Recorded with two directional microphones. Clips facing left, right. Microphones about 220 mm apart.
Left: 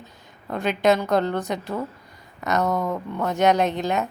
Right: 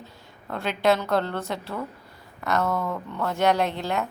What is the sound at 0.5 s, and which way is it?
A woman's voice, 15° left (ahead or behind).